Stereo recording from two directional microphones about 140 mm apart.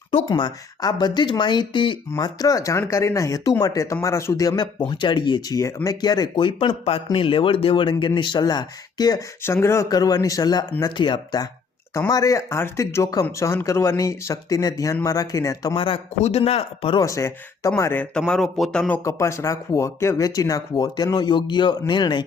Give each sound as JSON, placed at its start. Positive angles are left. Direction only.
{"t": 0.3, "sound": "speech", "side_deg": 30}
{"t": 9.4, "sound": "speech", "side_deg": 20}
{"t": 15.7, "sound": "speech", "side_deg": 35}
{"t": 16.2, "sound": "speech", "side_deg": 50}
{"t": 17.0, "sound": "speech", "side_deg": 20}
{"t": 19.0, "sound": "speech", "side_deg": 20}